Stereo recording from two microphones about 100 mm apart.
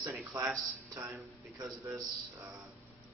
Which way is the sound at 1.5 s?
30° right (ahead or behind).